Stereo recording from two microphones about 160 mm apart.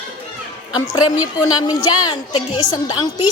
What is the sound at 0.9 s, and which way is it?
A woman's voice, 25° left (ahead or behind).